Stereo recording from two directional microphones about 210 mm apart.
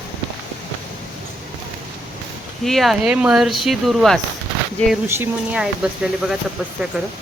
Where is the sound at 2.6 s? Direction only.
Centre (ahead or behind).